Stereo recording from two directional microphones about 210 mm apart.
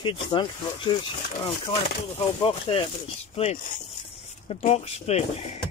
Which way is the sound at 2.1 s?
25° left (ahead or behind).